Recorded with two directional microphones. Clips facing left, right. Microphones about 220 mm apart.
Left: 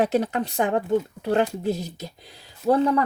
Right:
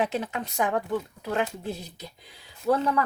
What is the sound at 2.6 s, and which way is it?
Speech, 30° left (ahead or behind).